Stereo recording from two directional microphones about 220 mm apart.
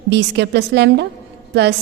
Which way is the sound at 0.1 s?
50° right (ahead or behind).